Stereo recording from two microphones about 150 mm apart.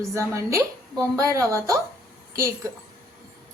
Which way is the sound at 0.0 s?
20° right (ahead or behind).